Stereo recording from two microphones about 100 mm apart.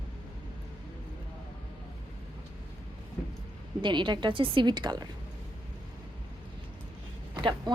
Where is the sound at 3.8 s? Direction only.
50° right (ahead or behind).